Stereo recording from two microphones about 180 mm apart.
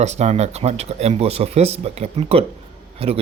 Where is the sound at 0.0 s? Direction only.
40° right (ahead or behind).